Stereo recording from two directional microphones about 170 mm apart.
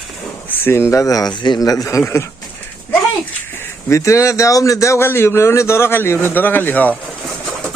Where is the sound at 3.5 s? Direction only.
15° left (ahead or behind).